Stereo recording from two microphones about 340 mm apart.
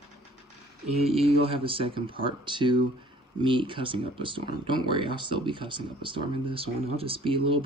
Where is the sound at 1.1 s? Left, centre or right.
Centre.